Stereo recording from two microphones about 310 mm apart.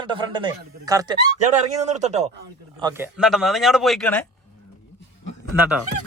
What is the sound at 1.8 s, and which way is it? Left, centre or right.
Speech, right.